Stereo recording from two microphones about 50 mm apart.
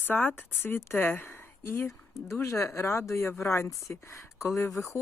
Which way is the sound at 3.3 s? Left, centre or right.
Left.